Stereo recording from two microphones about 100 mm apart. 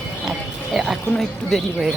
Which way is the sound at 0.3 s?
5° right (ahead or behind).